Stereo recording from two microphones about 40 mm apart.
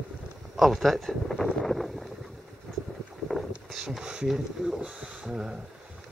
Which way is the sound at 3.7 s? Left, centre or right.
Centre.